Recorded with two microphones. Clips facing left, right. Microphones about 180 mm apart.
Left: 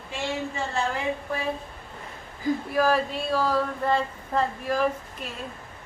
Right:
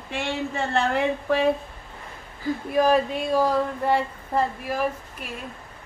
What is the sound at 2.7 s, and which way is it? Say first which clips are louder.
Speech: right 5 dB; 20° right (ahead or behind).